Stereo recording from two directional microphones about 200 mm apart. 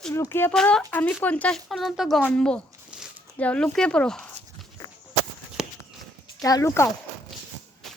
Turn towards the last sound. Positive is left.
turn(degrees=15)  # may be behind; listen again after turning